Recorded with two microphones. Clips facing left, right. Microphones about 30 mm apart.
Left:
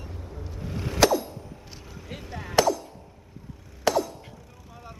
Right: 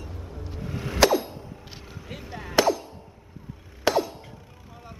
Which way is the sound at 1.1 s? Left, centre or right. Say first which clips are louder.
Right 2 dB; right.